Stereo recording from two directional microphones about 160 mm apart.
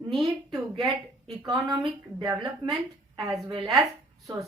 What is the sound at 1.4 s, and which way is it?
A woman's voice, 20° right (ahead or behind).